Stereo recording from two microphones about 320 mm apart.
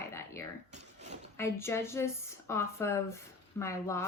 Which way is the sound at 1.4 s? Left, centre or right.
Centre.